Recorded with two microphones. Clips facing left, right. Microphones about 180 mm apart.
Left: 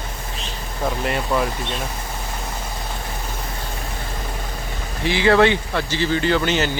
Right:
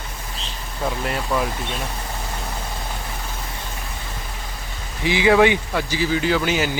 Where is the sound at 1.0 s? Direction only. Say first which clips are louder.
Left 2 dB; centre (ahead or behind).